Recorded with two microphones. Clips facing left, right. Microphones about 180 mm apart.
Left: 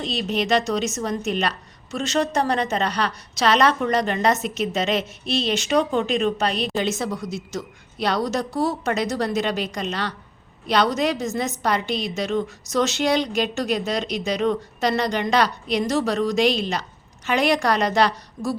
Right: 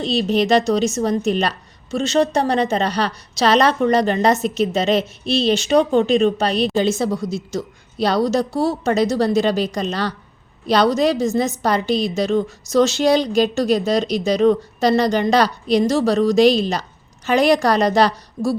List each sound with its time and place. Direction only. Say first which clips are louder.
0.0 s a woman's voice: right 6 dB; 30° right (ahead or behind)